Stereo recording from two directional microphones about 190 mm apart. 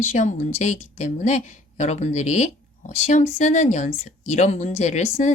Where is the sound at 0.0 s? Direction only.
40° left (ahead or behind).